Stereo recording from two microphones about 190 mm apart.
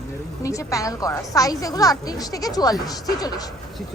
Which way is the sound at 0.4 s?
15° left (ahead or behind).